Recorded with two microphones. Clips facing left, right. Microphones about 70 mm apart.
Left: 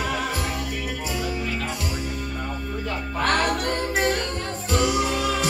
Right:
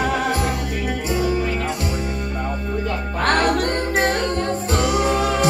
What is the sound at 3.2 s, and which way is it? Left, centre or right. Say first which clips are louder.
Music: right 4 dB; right.